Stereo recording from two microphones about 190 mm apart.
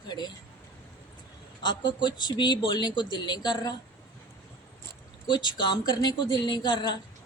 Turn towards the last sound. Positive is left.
turn(degrees=25)  # may be behind; listen again after turning